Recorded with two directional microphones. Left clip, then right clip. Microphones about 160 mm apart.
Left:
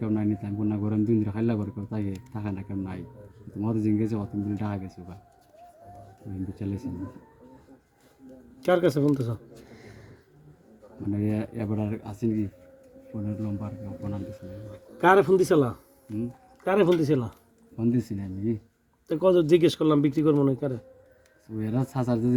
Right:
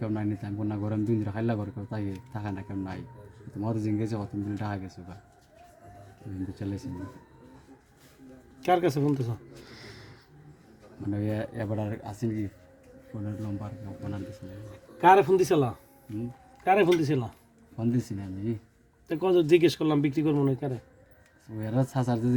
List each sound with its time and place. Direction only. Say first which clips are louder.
0.0 s a man's voice: left 4 dB; 20° right (ahead or behind)
6.5 s speech: left 3 dB; 20° right (ahead or behind)
8.6 s a man's voice: left 2 dB; 5° right (ahead or behind)
9.6 s snort: right 2 dB; 25° right (ahead or behind)
11.1 s a man's voice: left 2 dB; 15° right (ahead or behind)
14.9 s a man's voice: even; centre (ahead or behind)
17.7 s a man's voice: left 3 dB; 15° right (ahead or behind)
19.0 s a man's voice: left 3 dB; 5° right (ahead or behind)